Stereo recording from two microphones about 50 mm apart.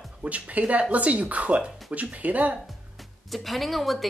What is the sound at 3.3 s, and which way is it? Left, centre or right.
Speech, centre.